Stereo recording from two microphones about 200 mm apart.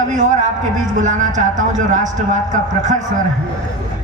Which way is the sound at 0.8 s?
40° right (ahead or behind).